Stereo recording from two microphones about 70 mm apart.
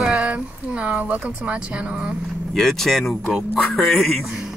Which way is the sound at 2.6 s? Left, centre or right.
Centre.